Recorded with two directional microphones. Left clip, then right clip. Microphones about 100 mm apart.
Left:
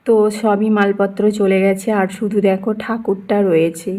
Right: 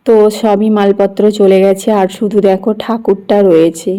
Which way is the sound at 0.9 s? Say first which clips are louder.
Right 6 dB; 30° right (ahead or behind).